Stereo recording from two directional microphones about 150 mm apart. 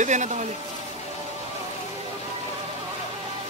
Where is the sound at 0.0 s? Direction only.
55° right (ahead or behind).